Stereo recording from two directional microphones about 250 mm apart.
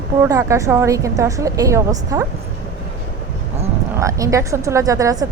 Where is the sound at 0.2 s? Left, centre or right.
Centre.